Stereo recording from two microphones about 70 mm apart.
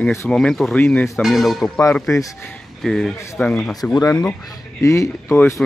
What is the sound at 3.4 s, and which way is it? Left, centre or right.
Speech, left.